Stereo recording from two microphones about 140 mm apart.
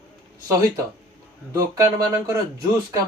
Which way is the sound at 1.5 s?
25° right (ahead or behind).